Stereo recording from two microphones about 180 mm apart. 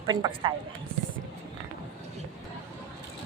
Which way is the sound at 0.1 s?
25° right (ahead or behind).